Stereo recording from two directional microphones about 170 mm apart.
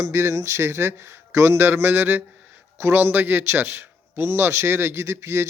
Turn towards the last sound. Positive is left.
turn(degrees=-15)  # may be behind; listen again after turning